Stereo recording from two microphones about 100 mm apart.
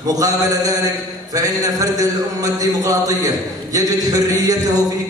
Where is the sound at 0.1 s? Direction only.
35° right (ahead or behind).